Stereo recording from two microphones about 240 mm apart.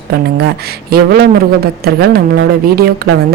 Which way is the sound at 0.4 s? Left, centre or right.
Right.